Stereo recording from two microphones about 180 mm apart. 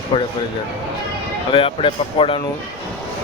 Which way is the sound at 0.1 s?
30° left (ahead or behind).